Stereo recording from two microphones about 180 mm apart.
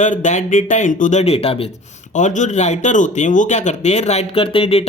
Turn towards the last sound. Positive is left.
turn(degrees=30)  # may be behind; listen again after turning